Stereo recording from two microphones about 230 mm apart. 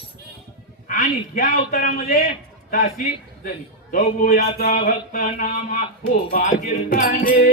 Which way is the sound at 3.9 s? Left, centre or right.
Left.